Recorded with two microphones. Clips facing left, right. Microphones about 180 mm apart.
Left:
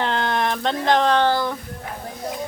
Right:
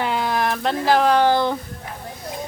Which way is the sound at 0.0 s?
5° right (ahead or behind).